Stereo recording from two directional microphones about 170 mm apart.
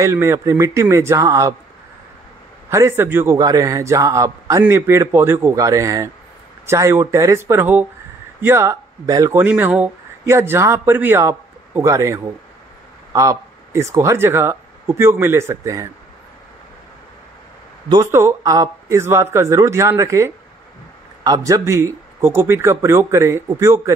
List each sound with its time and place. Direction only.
0.0 s a man's voice: 15° right (ahead or behind)
2.7 s a man's voice: 15° right (ahead or behind)
18.1 s a man's voice: 15° right (ahead or behind)